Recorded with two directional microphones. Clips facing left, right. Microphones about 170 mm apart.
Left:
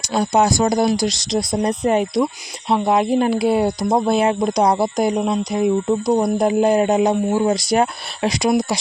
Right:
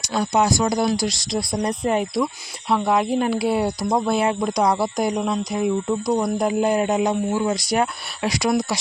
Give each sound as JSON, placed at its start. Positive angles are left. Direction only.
{"t": 0.1, "sound": "speech", "side_deg": 25}